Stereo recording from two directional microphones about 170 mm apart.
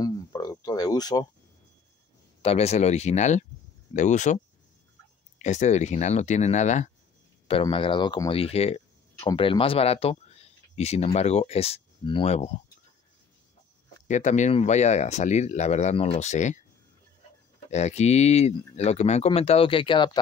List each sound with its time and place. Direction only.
0.0 s a sound: 25° left (ahead or behind)
2.4 s speech: 40° left (ahead or behind)
5.4 s speech: 45° left (ahead or behind)
7.6 s speech: 30° left (ahead or behind)
9.2 s speech: 25° left (ahead or behind)
14.0 s speech: 45° left (ahead or behind)
17.6 s speech: 40° left (ahead or behind)